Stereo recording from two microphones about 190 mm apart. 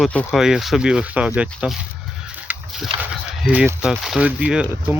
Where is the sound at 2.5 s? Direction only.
10° right (ahead or behind).